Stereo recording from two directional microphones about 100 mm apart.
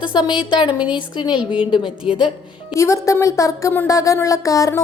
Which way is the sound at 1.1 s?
50° left (ahead or behind).